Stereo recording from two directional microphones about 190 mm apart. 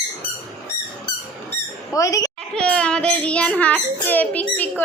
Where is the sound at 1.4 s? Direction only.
15° left (ahead or behind).